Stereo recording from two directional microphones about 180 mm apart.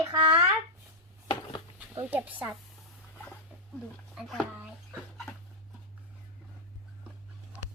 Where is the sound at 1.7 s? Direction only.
10° right (ahead or behind).